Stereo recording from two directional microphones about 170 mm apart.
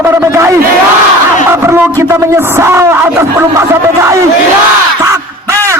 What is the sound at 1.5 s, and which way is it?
A man's voice, 15° right (ahead or behind).